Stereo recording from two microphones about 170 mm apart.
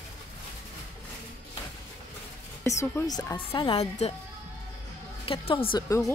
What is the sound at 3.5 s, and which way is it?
Speech, 30° left (ahead or behind).